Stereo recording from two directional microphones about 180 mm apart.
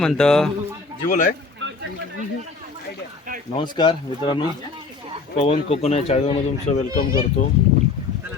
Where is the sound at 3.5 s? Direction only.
25° left (ahead or behind).